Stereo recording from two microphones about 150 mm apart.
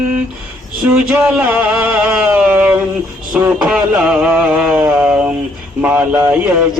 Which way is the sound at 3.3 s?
10° right (ahead or behind).